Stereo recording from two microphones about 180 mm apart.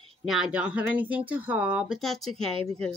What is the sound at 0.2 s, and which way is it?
Speech, centre (ahead or behind).